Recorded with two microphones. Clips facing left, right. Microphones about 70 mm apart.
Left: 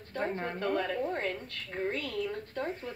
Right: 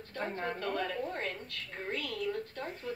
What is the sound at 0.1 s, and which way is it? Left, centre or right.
A woman's voice, left.